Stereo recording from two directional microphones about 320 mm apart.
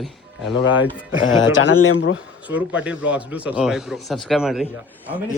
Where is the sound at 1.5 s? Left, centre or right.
Left.